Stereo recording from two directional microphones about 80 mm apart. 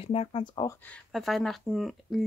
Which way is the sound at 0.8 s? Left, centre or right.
Centre.